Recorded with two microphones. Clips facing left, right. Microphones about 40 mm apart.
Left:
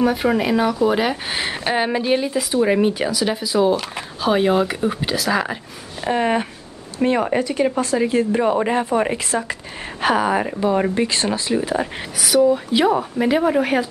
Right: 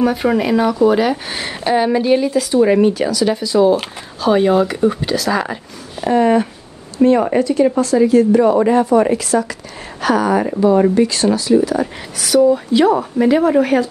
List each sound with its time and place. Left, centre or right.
0.0 s speech: centre
6.0 s speech: left
7.2 s speech: centre
7.4 s speech: left
12.2 s speech: centre